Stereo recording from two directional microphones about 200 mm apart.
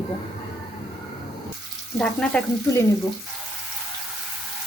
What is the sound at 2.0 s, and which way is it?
Speech, 5° left (ahead or behind).